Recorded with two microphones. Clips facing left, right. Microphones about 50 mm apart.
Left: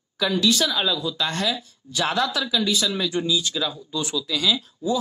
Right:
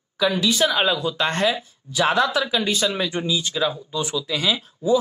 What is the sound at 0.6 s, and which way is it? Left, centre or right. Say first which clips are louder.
Speech: right 4 dB; right.